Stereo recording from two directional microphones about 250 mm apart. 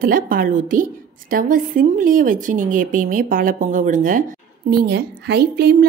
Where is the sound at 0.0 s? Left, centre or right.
Right.